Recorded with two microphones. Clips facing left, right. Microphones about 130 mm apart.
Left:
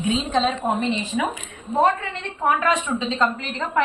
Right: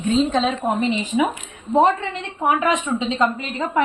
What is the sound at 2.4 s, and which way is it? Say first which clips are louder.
Speech: right 1 dB; 15° right (ahead or behind).